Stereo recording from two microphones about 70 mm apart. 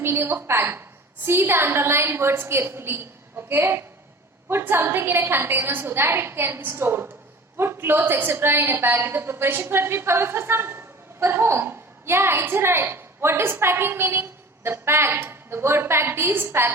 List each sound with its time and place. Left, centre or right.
0.0 s a woman's voice: right